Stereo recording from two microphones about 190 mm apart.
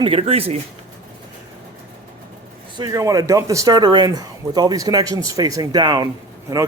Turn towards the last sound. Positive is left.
turn(degrees=-20)  # may be behind; listen again after turning